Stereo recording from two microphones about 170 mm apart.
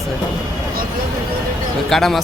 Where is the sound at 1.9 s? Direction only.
Centre (ahead or behind).